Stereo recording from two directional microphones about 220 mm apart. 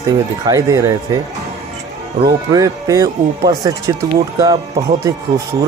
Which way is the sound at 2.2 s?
15° right (ahead or behind).